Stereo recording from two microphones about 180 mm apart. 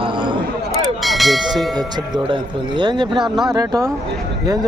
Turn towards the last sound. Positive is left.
turn(degrees=-20)  # may be behind; listen again after turning